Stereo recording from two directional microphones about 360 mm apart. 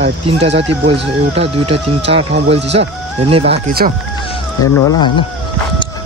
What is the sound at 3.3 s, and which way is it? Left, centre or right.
Speech, centre.